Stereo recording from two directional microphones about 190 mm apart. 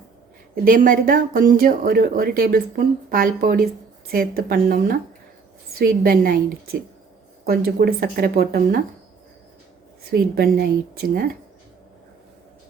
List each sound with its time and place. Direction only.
0.5 s speech: 50° right (ahead or behind)
6.0 s speech: 50° right (ahead or behind)
10.1 s speech: 55° right (ahead or behind)